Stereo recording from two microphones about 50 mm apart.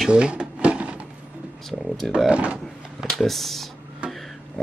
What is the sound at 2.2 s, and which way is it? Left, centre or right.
Speech, right.